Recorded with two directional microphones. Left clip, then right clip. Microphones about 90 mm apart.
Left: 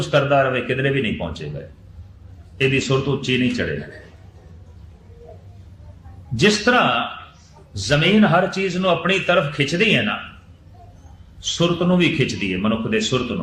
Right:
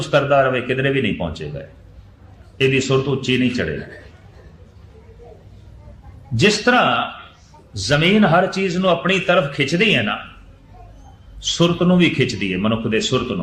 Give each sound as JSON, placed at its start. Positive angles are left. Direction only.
{"t": 0.0, "sound": "a man's voice", "side_deg": 25}
{"t": 2.6, "sound": "a man's voice", "side_deg": 25}
{"t": 6.3, "sound": "a man's voice", "side_deg": 30}
{"t": 11.3, "sound": "a man's voice", "side_deg": 20}